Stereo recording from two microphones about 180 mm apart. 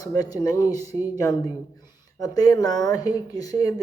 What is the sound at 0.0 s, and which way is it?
Speech, 20° left (ahead or behind).